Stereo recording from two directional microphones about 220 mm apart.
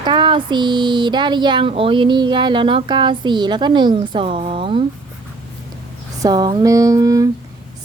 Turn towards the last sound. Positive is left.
turn(degrees=-15)  # may be behind; listen again after turning